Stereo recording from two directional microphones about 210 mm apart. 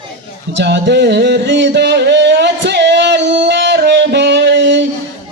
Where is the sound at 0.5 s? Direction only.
55° right (ahead or behind).